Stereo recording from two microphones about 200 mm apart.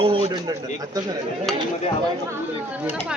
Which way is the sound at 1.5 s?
Centre (ahead or behind).